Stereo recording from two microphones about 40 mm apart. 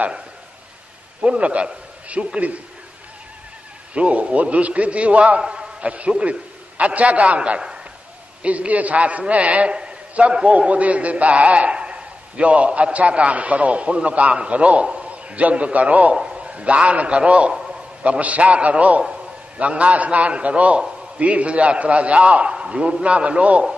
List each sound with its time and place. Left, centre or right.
1.2 s a man's voice: right
3.9 s a man's voice: right
5.4 s a man's voice: right
8.4 s a man's voice: right
16.3 s a man's voice: right